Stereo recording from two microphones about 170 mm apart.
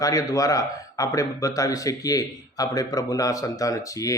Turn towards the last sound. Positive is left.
turn(degrees=20)  # may be behind; listen again after turning